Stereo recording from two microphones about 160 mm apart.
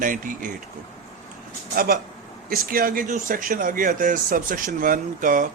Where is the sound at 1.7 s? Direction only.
65° right (ahead or behind).